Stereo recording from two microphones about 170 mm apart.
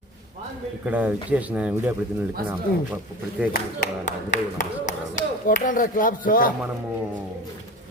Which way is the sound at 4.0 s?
45° left (ahead or behind).